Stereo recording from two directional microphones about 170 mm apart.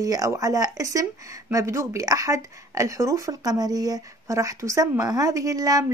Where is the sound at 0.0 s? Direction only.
20° right (ahead or behind).